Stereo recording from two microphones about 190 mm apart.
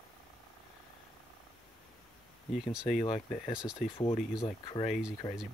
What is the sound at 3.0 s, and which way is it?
Speech, 35° left (ahead or behind).